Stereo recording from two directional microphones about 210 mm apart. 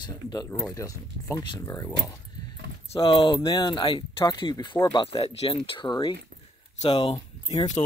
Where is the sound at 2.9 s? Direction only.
25° left (ahead or behind).